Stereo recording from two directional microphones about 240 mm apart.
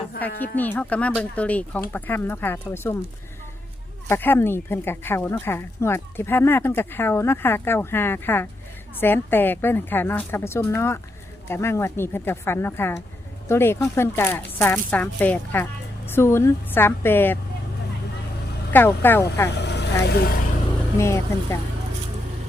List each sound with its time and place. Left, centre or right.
0.3 s speech: centre
4.1 s speech: centre
18.7 s speech: centre
19.6 s vehicle: left
20.1 s speech: left
21.0 s speech: centre